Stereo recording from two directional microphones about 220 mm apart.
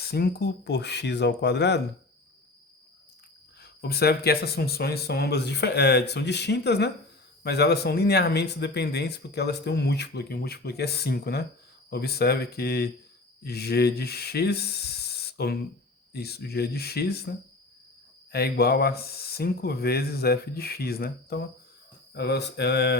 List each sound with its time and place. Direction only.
0.0 s speech: 45° left (ahead or behind)
3.6 s speech: 45° left (ahead or behind)